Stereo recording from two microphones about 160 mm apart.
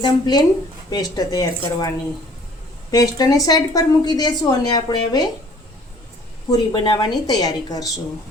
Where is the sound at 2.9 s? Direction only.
25° left (ahead or behind).